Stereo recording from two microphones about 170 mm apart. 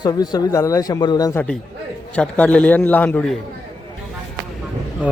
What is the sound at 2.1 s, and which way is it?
A man's voice, 5° left (ahead or behind).